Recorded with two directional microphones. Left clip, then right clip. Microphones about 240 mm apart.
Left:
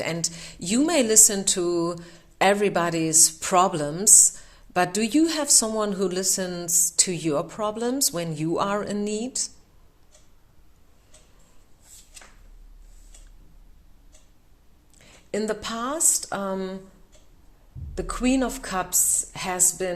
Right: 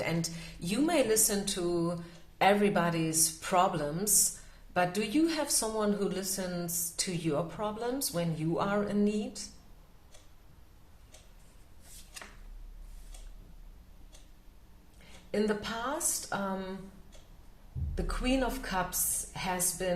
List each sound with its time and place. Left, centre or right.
0.0 s a woman's voice: left
15.3 s speech: left
17.9 s speech: left